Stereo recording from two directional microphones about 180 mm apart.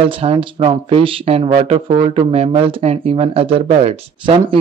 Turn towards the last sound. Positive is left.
turn(degrees=-30)  # may be behind; listen again after turning